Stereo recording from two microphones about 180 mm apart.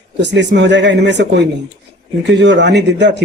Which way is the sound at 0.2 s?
75° right (ahead or behind).